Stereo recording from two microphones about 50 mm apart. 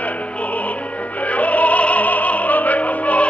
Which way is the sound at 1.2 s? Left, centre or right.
Left.